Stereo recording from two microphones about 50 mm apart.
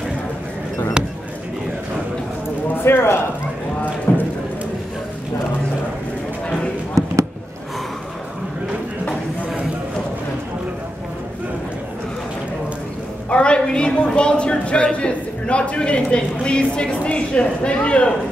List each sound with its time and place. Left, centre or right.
2.8 s speech: left
4.1 s clip-clop: left
13.3 s a woman's voice: left